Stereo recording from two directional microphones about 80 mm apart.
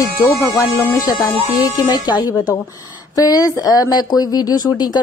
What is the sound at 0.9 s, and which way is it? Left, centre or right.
Speech, left.